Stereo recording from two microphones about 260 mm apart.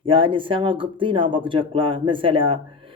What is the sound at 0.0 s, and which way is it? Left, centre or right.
Speech, centre.